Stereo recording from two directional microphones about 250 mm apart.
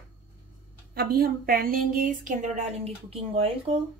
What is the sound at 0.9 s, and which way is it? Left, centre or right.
A woman's voice, right.